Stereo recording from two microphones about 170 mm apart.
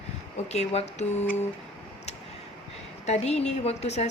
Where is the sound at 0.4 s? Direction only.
40° left (ahead or behind).